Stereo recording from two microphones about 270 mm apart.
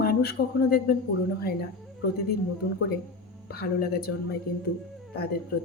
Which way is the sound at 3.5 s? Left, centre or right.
Left.